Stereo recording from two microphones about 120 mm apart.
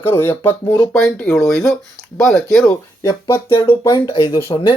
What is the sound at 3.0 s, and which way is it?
Speech, 25° left (ahead or behind).